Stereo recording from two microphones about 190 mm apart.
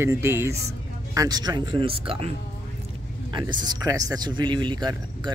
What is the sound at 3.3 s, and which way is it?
Speech, 20° right (ahead or behind).